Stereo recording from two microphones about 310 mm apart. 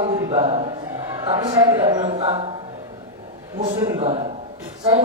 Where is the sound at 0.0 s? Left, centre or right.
Centre.